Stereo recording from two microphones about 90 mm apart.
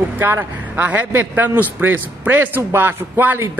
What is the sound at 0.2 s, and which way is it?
A man's voice, 20° right (ahead or behind).